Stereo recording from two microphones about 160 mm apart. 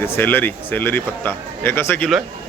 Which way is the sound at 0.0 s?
10° left (ahead or behind).